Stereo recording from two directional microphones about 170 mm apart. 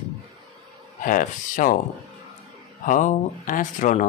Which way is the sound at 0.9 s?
50° left (ahead or behind).